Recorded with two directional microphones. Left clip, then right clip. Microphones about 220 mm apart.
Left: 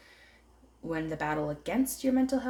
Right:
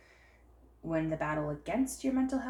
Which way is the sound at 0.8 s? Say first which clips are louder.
Left 1 dB; 55° left (ahead or behind).